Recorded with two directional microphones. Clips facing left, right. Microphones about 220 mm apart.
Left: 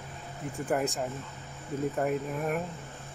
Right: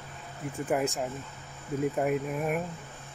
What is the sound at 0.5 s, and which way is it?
Speech, centre (ahead or behind).